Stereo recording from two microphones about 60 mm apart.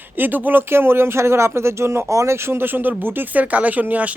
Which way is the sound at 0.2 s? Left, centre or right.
Right.